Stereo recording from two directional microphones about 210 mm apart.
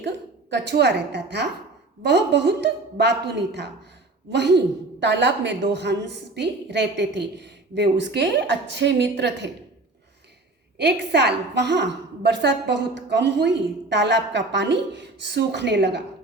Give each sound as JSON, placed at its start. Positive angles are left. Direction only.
{"t": 0.5, "sound": "a woman's voice", "side_deg": -55}
{"t": 10.8, "sound": "a woman's voice", "side_deg": -55}